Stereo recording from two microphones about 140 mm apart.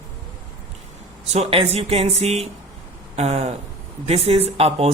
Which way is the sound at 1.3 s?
45° right (ahead or behind).